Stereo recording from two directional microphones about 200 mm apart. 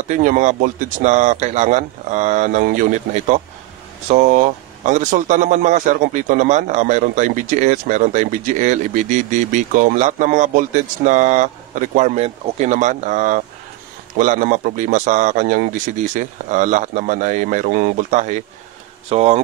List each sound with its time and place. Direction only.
0.2 s speech: 40° right (ahead or behind)